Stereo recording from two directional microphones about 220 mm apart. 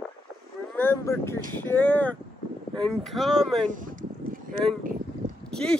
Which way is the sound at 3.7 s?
35° right (ahead or behind).